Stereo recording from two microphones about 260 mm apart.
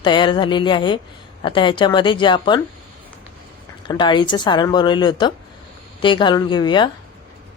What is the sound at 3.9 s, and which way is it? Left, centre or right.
A woman's voice, centre.